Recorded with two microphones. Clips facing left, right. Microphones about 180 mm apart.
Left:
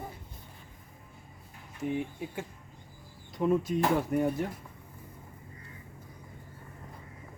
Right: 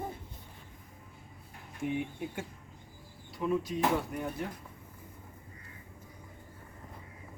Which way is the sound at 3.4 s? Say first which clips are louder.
Left 3 dB; 50° left (ahead or behind).